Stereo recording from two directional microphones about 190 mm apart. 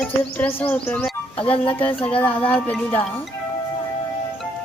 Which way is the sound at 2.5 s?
10° left (ahead or behind).